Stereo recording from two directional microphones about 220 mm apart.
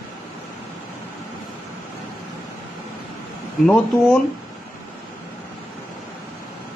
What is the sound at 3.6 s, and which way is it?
Speech, centre (ahead or behind).